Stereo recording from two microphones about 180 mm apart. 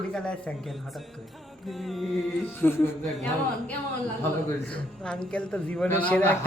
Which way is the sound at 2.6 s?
10° left (ahead or behind).